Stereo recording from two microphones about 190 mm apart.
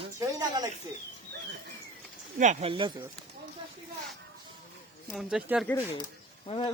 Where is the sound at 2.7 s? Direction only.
25° right (ahead or behind).